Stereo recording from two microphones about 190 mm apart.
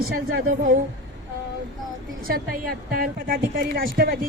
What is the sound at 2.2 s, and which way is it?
A woman's voice, 50° right (ahead or behind).